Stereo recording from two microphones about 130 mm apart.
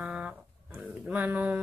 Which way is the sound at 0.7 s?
10° right (ahead or behind).